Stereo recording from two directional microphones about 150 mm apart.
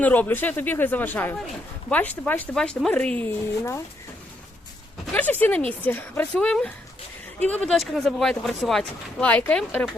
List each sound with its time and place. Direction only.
0.0 s speech: 10° left (ahead or behind)
5.1 s speech: 10° left (ahead or behind)